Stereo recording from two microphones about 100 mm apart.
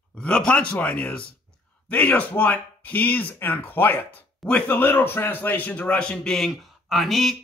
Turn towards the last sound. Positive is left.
turn(degrees=0)  # may be behind; listen again after turning